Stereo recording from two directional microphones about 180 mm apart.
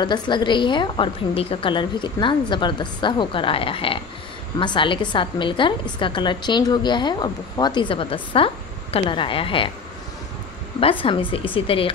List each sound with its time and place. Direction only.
0.0 s a woman's voice: 25° left (ahead or behind)
10.8 s a woman's voice: 30° left (ahead or behind)